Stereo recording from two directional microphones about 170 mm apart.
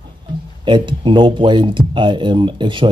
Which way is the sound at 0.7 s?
30° right (ahead or behind).